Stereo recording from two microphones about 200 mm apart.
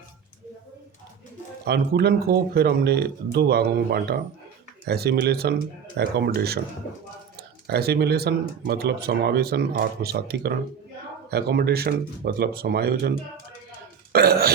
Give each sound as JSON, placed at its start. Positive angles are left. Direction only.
{"t": 1.6, "sound": "speech", "side_deg": -55}